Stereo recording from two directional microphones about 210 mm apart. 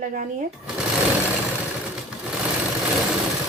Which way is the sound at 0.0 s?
40° right (ahead or behind).